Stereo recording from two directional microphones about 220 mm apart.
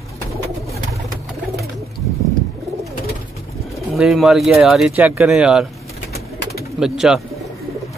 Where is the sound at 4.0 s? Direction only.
Centre (ahead or behind).